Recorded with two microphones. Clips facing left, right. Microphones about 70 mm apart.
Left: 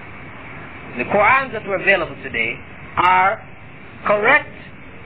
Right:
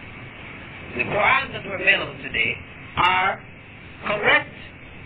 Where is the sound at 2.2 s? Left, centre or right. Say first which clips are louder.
Left 2 dB; left.